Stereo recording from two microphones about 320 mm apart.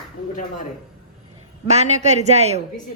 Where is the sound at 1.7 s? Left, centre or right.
Right.